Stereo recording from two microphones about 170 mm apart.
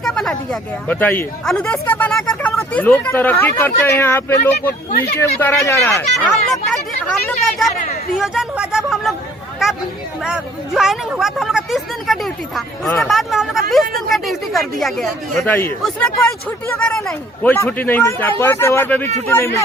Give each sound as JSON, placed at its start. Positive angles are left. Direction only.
{"t": 0.0, "sound": "speech", "side_deg": 0}
{"t": 15.4, "sound": "speech", "side_deg": 10}